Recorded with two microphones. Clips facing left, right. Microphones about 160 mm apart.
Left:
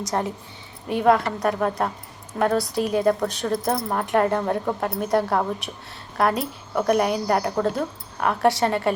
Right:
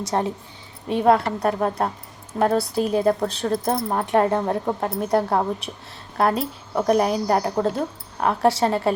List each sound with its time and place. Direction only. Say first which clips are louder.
0.0 s a woman's voice: right 2 dB; 30° right (ahead or behind)